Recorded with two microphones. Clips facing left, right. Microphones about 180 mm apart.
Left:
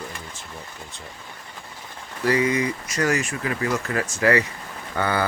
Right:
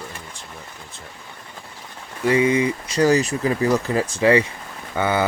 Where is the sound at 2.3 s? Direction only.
25° right (ahead or behind).